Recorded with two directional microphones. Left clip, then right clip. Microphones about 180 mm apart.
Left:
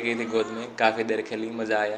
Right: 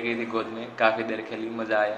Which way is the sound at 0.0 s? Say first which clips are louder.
Left 2 dB; 30° left (ahead or behind).